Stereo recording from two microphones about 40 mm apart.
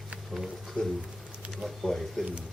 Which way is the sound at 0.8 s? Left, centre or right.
Left.